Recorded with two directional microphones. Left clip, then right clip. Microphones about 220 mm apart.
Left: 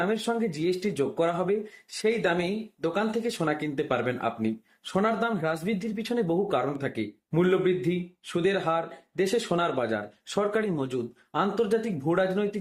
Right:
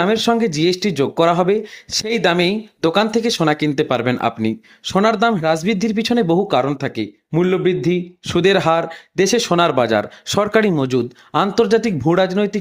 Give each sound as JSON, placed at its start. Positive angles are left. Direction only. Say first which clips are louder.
{"t": 0.0, "sound": "speech", "louder": "right 11 dB", "side_deg": -45}